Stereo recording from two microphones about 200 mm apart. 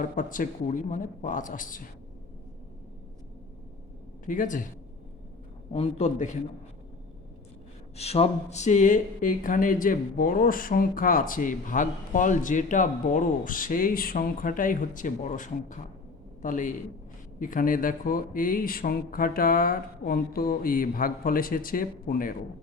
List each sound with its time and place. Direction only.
0.0 s speech: 40° left (ahead or behind)
4.3 s speech: 40° left (ahead or behind)
5.7 s speech: 35° left (ahead or behind)
7.9 s speech: 30° left (ahead or behind)